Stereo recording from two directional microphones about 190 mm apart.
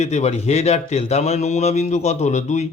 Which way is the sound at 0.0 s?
35° left (ahead or behind).